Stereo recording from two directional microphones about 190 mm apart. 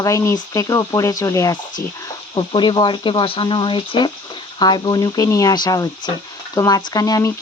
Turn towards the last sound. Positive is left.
turn(degrees=20)  # may be behind; listen again after turning